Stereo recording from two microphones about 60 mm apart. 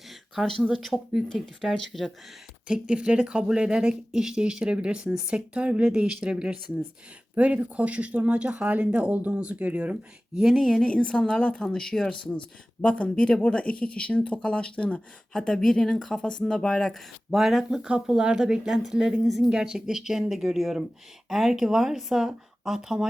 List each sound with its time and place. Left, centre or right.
0.1 s a sound: centre
0.7 s speech: centre
2.6 s speech: centre
7.3 s speech: right
10.4 s speech: centre
10.8 s speech: centre
15.4 s speech: centre
17.3 s speech: centre